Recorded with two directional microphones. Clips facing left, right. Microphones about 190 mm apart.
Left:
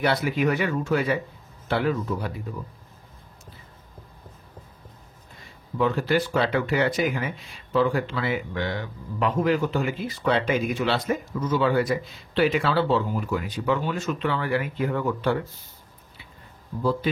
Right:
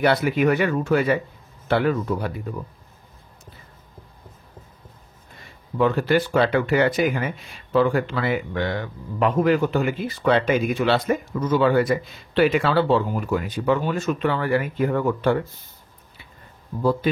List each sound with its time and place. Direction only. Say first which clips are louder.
0.0 s speech: right 4 dB; 55° right (ahead or behind)
5.8 s speech: right 3 dB; 55° right (ahead or behind)